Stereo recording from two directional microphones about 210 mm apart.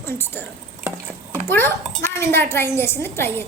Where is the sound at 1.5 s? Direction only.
10° left (ahead or behind).